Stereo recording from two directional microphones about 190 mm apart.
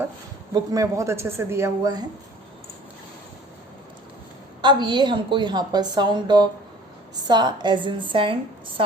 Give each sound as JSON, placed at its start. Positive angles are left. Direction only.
{"t": 0.5, "sound": "a woman's voice", "side_deg": -20}
{"t": 4.6, "sound": "a woman's voice", "side_deg": -25}